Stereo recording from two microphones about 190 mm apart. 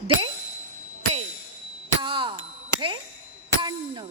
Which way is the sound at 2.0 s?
25° right (ahead or behind).